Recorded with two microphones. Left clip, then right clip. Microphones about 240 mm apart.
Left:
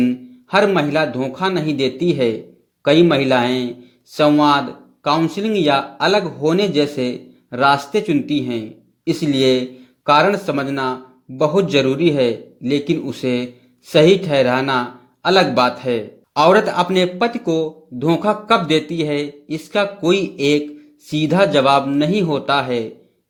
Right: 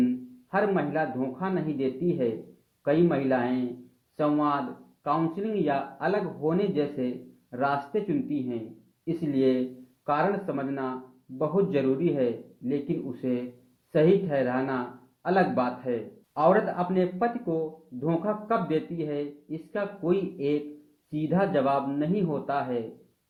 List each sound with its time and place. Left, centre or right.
0.5 s a man's voice: left